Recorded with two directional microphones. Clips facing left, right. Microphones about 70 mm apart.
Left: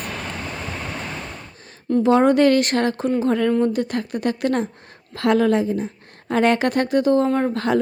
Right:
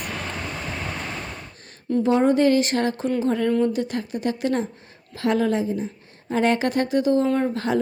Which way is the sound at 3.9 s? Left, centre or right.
Left.